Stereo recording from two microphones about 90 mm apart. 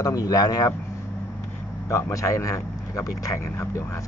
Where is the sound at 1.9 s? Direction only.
35° left (ahead or behind).